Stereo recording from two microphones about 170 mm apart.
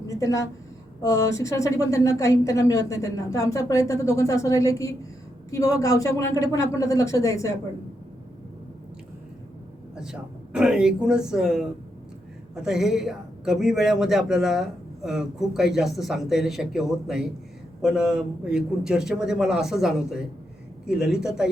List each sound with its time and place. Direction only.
0.1 s a sound: 20° left (ahead or behind)
1.0 s a woman's voice: 20° left (ahead or behind)
10.0 s speech: 5° right (ahead or behind)